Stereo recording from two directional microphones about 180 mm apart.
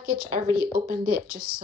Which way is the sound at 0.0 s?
55° right (ahead or behind).